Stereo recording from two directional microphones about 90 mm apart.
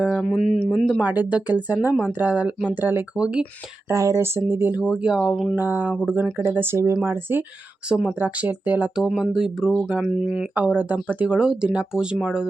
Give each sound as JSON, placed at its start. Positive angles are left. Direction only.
{"t": 0.2, "sound": "speech", "side_deg": 5}
{"t": 1.0, "sound": "speech", "side_deg": -15}
{"t": 3.8, "sound": "speech", "side_deg": -30}
{"t": 4.9, "sound": "speech", "side_deg": -10}
{"t": 5.5, "sound": "speech", "side_deg": -20}
{"t": 7.9, "sound": "speech", "side_deg": -5}
{"t": 8.2, "sound": "speech", "side_deg": -20}
{"t": 9.0, "sound": "speech", "side_deg": -5}